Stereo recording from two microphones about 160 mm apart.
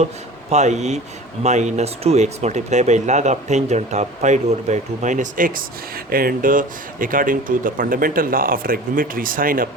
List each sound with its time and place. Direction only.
0.5 s speech: 45° right (ahead or behind); by 9.6 s 60° right (ahead or behind)